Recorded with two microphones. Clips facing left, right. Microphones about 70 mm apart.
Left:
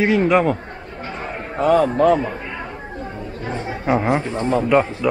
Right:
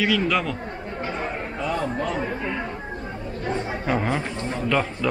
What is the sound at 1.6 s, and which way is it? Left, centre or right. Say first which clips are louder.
Speech: left 12 dB; left.